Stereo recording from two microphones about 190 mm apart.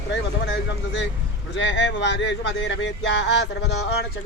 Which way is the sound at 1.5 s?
75° left (ahead or behind).